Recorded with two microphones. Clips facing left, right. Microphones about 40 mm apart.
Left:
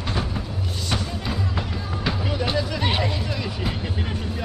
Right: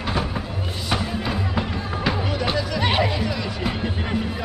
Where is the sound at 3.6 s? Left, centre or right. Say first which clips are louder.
Right 3 dB; centre.